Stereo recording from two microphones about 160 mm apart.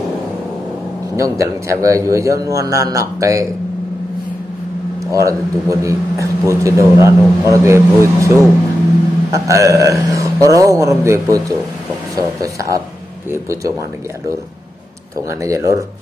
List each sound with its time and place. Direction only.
1.1 s a man's voice: 20° right (ahead or behind)
5.0 s a man's voice: 20° right (ahead or behind)
15.4 s a man's voice: 20° right (ahead or behind)